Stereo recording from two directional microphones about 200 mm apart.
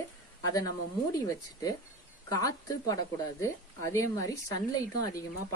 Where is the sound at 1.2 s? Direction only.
20° left (ahead or behind).